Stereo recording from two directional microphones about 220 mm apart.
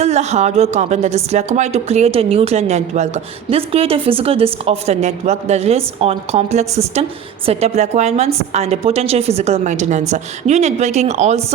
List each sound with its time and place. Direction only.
0.0 s a woman's voice: 30° right (ahead or behind)